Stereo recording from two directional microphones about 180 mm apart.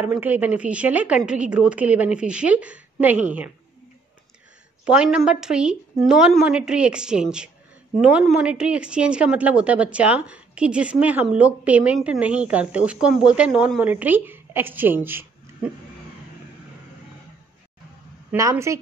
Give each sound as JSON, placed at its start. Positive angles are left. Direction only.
{"t": 0.0, "sound": "a woman's voice", "side_deg": -10}
{"t": 4.8, "sound": "a woman's voice", "side_deg": -5}
{"t": 18.3, "sound": "a woman's voice", "side_deg": -15}